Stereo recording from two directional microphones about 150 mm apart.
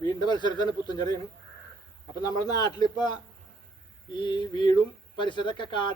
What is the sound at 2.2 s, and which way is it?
Speech, 25° left (ahead or behind).